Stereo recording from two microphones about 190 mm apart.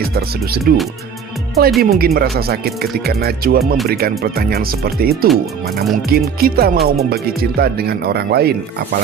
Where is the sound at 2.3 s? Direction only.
55° right (ahead or behind).